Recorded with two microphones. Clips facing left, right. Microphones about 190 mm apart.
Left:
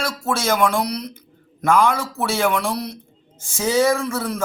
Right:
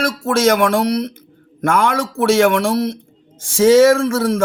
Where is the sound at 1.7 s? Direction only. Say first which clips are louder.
Even; 60° right (ahead or behind).